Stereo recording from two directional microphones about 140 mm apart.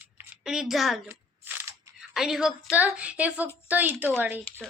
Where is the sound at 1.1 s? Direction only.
15° right (ahead or behind).